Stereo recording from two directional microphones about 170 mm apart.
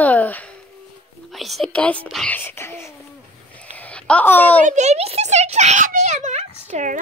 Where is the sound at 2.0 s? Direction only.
5° left (ahead or behind).